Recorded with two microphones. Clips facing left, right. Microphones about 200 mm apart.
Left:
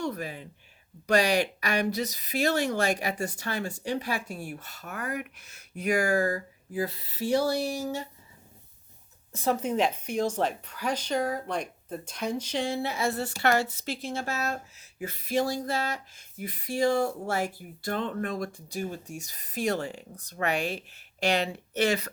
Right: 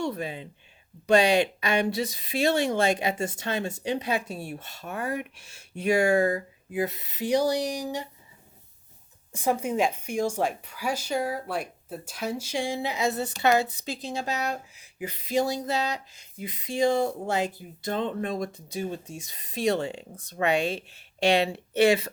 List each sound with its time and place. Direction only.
0.0 s speech: 25° right (ahead or behind)
9.3 s speech: 15° right (ahead or behind)